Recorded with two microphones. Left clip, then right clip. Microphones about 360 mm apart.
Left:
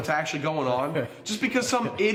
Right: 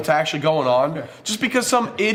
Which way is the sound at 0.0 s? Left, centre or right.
Right.